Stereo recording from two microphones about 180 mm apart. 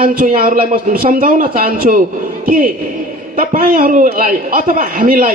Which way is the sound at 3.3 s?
50° right (ahead or behind).